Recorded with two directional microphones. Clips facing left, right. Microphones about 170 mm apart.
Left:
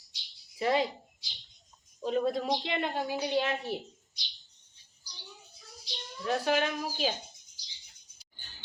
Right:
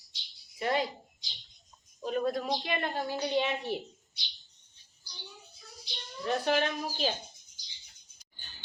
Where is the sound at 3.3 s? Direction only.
Centre (ahead or behind).